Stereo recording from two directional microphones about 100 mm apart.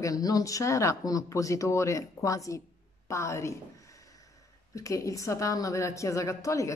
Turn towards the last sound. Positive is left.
turn(degrees=30)  # may be behind; listen again after turning